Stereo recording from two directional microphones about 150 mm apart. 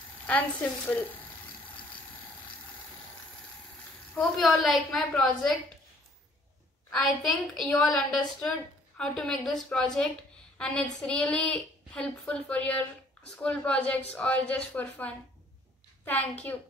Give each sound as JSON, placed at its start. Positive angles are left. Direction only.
{"t": 0.3, "sound": "a woman's voice", "side_deg": 10}
{"t": 4.1, "sound": "a woman's voice", "side_deg": 5}
{"t": 6.9, "sound": "a woman's voice", "side_deg": 0}